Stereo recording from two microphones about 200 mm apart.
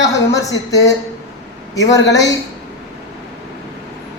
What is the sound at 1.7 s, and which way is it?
Speech, 15° left (ahead or behind).